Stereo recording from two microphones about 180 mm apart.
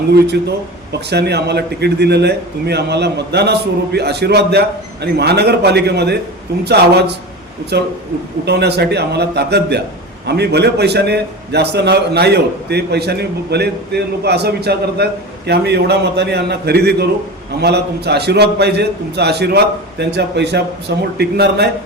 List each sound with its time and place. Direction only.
1.1 s a man's voice: 65° right (ahead or behind)